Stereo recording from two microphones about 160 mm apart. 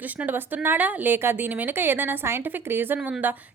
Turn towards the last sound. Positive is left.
turn(degrees=-10)  # may be behind; listen again after turning